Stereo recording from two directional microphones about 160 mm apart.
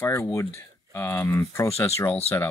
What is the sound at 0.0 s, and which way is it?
Speech, 15° left (ahead or behind).